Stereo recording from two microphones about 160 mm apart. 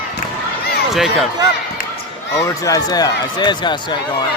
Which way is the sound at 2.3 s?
20° left (ahead or behind).